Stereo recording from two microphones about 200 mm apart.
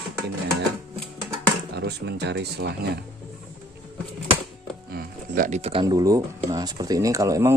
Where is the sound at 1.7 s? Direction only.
55° right (ahead or behind).